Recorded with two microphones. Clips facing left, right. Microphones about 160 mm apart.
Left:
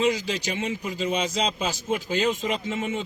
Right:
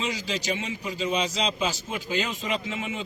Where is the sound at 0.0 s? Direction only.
50° left (ahead or behind).